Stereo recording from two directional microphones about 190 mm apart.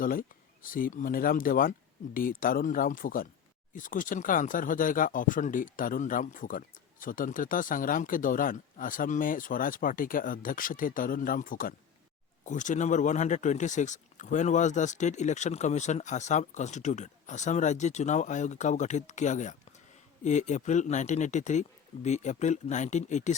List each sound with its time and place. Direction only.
0.0 s speech: 45° left (ahead or behind)